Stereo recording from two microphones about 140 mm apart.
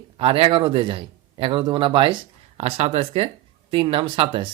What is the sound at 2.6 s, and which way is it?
Speech, 50° right (ahead or behind).